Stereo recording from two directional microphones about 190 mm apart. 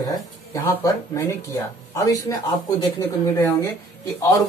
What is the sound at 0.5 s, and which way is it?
Speech, 15° left (ahead or behind).